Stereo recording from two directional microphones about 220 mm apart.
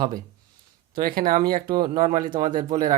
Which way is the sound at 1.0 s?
40° right (ahead or behind).